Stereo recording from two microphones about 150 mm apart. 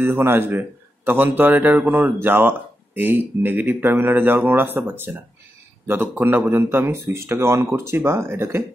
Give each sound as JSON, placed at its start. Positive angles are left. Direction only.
{"t": 0.0, "sound": "a man's voice", "side_deg": -15}